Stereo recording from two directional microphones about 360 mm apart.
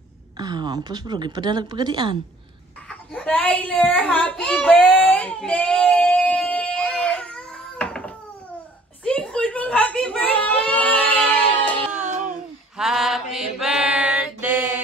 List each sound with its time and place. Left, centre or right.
0.4 s a woman's voice: centre
2.9 s a sound: centre
11.9 s music: centre
12.7 s mantra: centre